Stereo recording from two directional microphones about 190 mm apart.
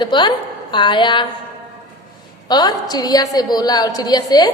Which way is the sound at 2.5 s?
20° left (ahead or behind).